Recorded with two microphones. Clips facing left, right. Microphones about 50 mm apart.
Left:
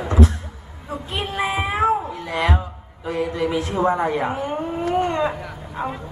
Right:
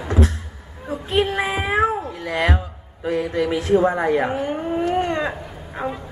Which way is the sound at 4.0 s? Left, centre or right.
Right.